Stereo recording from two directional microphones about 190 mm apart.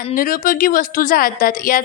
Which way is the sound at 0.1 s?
45° left (ahead or behind).